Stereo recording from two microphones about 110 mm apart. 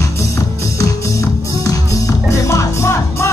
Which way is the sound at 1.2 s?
30° left (ahead or behind).